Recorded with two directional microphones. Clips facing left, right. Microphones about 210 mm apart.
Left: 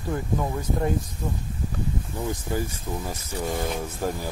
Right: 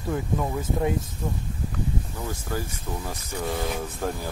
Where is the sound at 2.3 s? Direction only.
15° left (ahead or behind).